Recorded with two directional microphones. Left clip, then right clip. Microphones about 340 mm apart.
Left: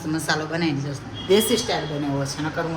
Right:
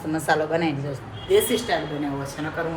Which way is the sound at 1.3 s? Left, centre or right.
Centre.